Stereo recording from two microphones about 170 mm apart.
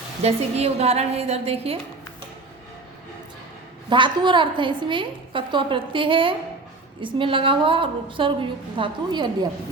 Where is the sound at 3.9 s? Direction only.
30° right (ahead or behind).